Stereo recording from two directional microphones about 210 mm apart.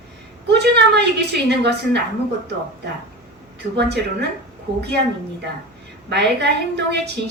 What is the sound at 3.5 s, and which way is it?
Speech, 55° right (ahead or behind).